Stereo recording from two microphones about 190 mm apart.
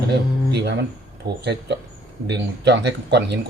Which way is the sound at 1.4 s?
65° right (ahead or behind).